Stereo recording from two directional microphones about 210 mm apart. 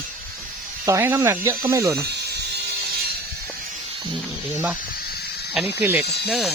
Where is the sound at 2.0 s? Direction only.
50° right (ahead or behind).